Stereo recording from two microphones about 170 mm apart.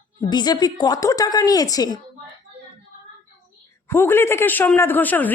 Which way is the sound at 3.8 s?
15° left (ahead or behind).